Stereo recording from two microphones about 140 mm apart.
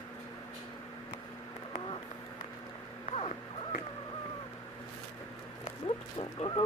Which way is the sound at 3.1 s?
45° left (ahead or behind).